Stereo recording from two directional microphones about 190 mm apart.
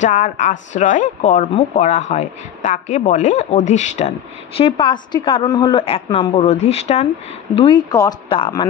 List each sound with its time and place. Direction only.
0.0 s speech: 40° left (ahead or behind)
4.6 s a woman's voice: 25° left (ahead or behind)